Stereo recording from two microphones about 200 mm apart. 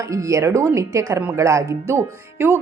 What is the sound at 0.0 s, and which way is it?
A woman's voice, 15° right (ahead or behind).